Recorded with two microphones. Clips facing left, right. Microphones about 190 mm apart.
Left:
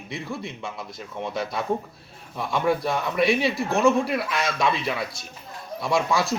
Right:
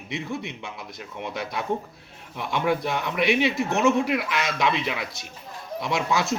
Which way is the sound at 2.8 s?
20° right (ahead or behind).